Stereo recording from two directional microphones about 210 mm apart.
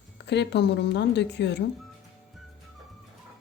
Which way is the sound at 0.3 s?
55° left (ahead or behind).